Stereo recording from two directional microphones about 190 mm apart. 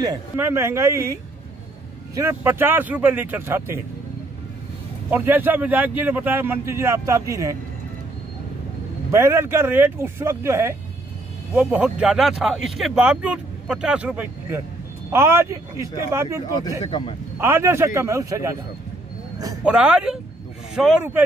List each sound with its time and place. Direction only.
0.0 s a man's voice: 15° right (ahead or behind)
2.1 s a man's voice: 10° right (ahead or behind)
5.1 s a man's voice: 10° right (ahead or behind)
9.1 s a man's voice: 15° right (ahead or behind)
16.8 s speech: 25° left (ahead or behind)
17.4 s a man's voice: 15° right (ahead or behind)
19.3 s vehicle: 20° right (ahead or behind)
19.6 s speech: 5° right (ahead or behind)